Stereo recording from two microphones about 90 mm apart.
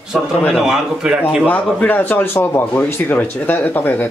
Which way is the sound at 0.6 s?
5° right (ahead or behind).